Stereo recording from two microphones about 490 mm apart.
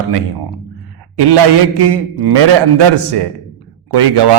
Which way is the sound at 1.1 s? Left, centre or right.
Right.